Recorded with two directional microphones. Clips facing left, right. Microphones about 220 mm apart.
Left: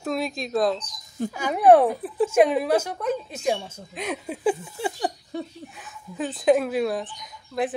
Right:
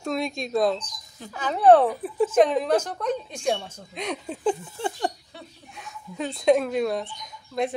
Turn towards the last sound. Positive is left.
turn(degrees=0)  # may be behind; listen again after turning